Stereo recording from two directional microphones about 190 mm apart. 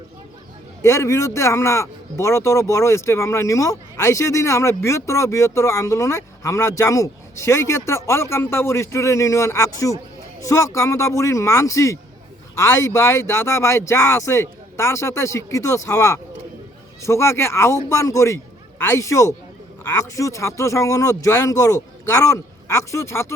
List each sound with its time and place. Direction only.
0.8 s speech: 15° left (ahead or behind)